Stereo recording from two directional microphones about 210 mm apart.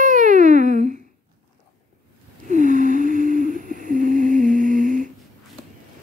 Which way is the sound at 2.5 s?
35° right (ahead or behind).